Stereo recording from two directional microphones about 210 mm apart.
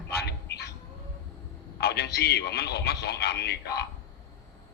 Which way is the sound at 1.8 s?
50° left (ahead or behind).